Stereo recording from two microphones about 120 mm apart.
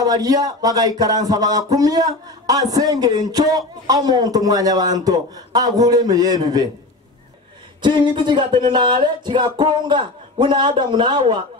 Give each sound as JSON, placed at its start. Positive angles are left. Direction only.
{"t": 0.0, "sound": "speech", "side_deg": -30}
{"t": 7.8, "sound": "speech", "side_deg": -40}